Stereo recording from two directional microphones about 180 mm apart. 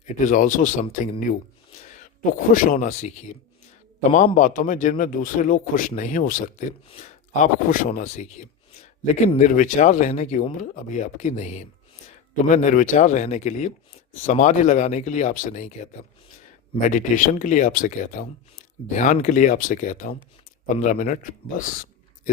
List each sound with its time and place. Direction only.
0.0 s speech: 45° left (ahead or behind)
1.8 s a sound: 40° left (ahead or behind)
2.5 s speech: 50° left (ahead or behind)
4.4 s speech: 50° left (ahead or behind)